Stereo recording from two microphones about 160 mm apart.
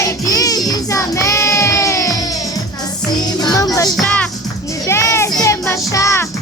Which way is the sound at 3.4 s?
20° left (ahead or behind).